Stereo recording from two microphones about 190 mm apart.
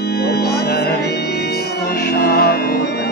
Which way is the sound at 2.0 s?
55° left (ahead or behind).